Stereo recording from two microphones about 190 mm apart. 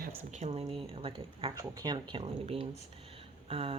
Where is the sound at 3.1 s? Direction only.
30° right (ahead or behind).